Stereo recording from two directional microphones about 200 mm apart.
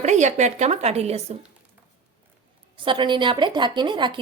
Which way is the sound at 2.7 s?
25° right (ahead or behind).